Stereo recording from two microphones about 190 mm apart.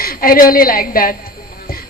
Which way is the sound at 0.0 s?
50° left (ahead or behind).